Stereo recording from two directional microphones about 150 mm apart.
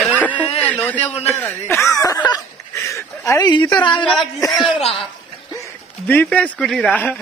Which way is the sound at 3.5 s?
30° left (ahead or behind).